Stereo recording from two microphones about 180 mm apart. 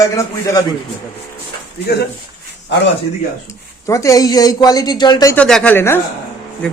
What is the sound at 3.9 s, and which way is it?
Speech, 15° left (ahead or behind).